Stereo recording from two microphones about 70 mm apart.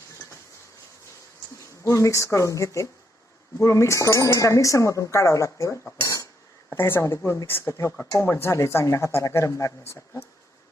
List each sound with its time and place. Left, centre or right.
1.6 s speech: left
6.0 s cutlery: left
6.7 s speech: left